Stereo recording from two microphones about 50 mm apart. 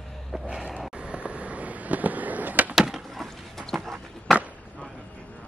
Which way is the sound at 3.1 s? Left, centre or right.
Centre.